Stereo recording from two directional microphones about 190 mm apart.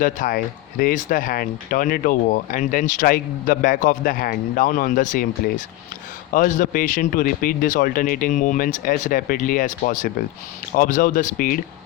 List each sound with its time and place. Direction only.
0.0 s speech: 45° left (ahead or behind)